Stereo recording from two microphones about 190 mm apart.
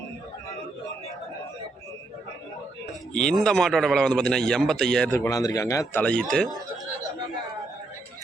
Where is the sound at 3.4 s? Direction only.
Centre (ahead or behind).